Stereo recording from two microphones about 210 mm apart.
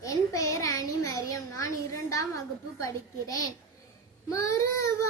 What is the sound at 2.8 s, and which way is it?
Speech, 15° left (ahead or behind).